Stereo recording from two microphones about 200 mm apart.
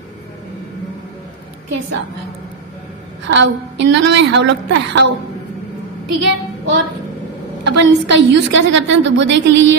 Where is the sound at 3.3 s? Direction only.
65° right (ahead or behind).